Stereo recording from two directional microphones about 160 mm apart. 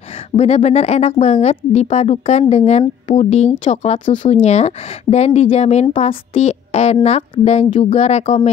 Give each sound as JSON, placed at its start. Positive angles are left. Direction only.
{"t": 0.4, "sound": "speech", "side_deg": 45}